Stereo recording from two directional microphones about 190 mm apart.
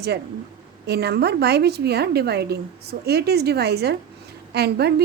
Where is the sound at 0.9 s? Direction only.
60° right (ahead or behind).